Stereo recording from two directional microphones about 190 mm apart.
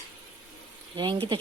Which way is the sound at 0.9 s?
25° right (ahead or behind).